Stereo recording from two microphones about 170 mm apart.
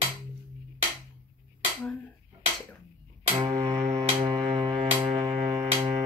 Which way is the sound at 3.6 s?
40° right (ahead or behind).